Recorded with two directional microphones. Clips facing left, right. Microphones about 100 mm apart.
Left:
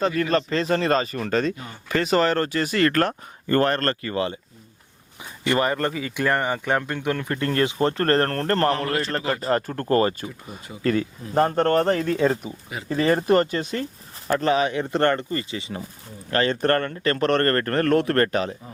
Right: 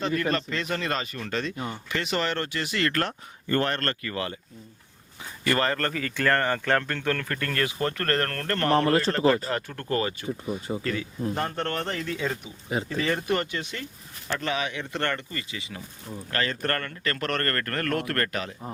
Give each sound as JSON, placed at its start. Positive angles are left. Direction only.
{"t": 0.2, "sound": "speech", "side_deg": 35}
{"t": 8.7, "sound": "speech", "side_deg": -35}
{"t": 9.3, "sound": "speech", "side_deg": 40}